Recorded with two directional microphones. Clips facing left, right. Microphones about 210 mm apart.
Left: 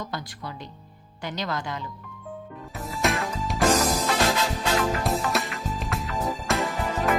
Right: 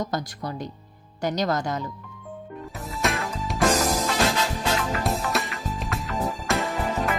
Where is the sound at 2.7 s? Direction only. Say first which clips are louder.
Left 1 dB; centre (ahead or behind).